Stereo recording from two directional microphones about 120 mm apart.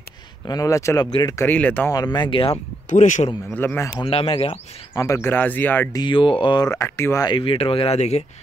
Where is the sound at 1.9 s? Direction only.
35° left (ahead or behind).